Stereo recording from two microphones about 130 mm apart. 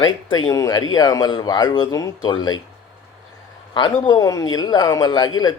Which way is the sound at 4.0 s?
30° left (ahead or behind).